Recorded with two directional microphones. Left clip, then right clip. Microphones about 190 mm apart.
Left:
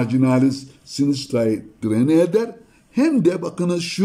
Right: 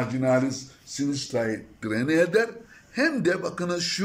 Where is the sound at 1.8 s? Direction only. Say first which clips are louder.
Left 6 dB; 30° left (ahead or behind).